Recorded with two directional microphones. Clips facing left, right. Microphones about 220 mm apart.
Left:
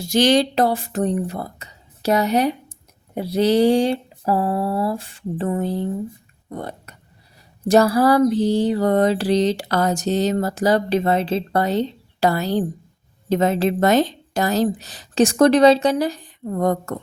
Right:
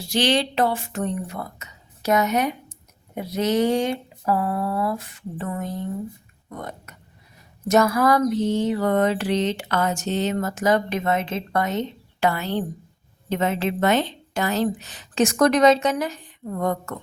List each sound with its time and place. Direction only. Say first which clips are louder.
0.0 s speech: left 5 dB; 45° left (ahead or behind)
7.7 s mantra: left 3 dB; 30° left (ahead or behind)